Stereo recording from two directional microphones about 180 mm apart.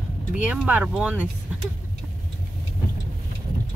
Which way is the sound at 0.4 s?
5° right (ahead or behind).